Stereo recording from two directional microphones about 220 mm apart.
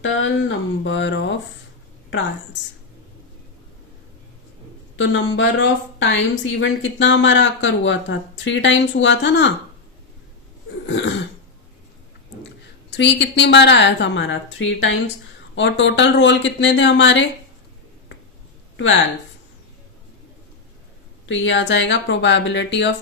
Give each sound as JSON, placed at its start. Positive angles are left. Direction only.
{"t": 0.0, "sound": "a sound", "side_deg": 60}
{"t": 4.9, "sound": "a woman's voice", "side_deg": 55}
{"t": 10.8, "sound": "throat clearing", "side_deg": 55}
{"t": 12.9, "sound": "a woman's voice", "side_deg": 55}
{"t": 21.2, "sound": "a woman's voice", "side_deg": 55}